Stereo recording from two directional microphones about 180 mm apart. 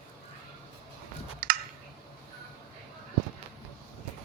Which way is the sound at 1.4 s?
50° right (ahead or behind).